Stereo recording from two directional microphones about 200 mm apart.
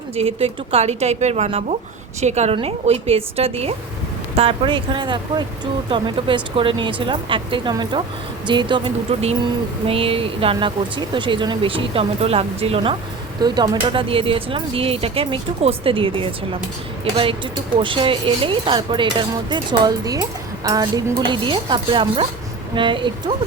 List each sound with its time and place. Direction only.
0.2 s a woman's voice: 30° right (ahead or behind)
17.8 s speech: 25° right (ahead or behind)